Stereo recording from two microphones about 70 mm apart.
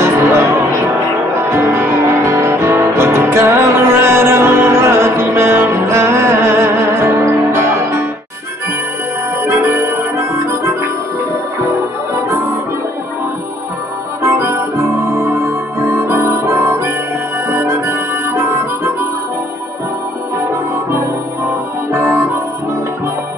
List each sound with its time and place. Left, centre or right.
0.0 s music: right
1.5 s music: right
9.4 s music: right
14.2 s music: right
17.5 s harmonica: right
21.9 s music: right